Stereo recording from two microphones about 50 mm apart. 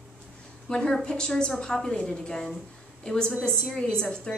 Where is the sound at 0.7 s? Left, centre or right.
Centre.